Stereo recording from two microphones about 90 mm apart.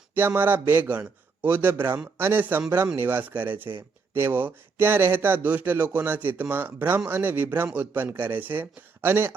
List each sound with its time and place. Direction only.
0.1 s speech: 20° right (ahead or behind)